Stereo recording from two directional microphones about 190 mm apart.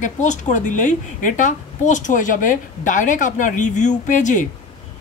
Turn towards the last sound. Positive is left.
turn(degrees=40)  # may be behind; listen again after turning